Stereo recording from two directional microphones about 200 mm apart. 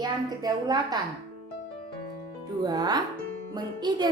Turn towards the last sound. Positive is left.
turn(degrees=-20)  # may be behind; listen again after turning